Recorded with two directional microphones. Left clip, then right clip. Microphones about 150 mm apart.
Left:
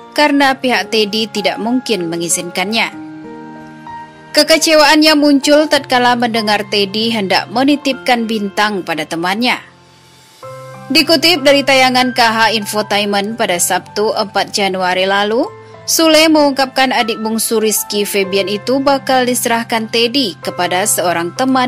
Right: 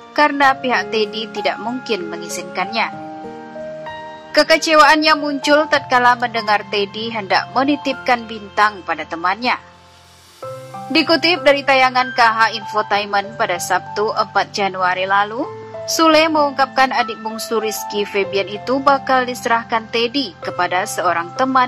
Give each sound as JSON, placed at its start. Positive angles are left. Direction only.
{"t": 0.1, "sound": "a woman's voice", "side_deg": 35}
{"t": 4.3, "sound": "a woman's voice", "side_deg": 35}
{"t": 10.9, "sound": "a woman's voice", "side_deg": 30}